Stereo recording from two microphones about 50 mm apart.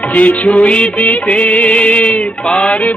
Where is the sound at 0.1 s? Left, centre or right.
Left.